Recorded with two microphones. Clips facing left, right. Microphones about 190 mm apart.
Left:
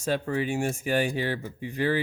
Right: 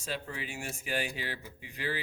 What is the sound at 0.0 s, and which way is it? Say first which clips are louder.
Speech: left 12 dB; 55° left (ahead or behind).